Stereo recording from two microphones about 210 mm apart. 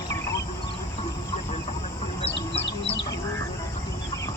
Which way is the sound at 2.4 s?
30° left (ahead or behind).